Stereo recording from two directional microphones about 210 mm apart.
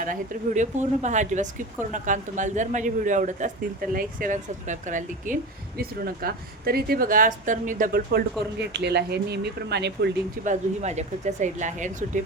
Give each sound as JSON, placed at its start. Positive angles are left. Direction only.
{"t": 0.0, "sound": "speech", "side_deg": -40}
{"t": 10.4, "sound": "speech", "side_deg": -35}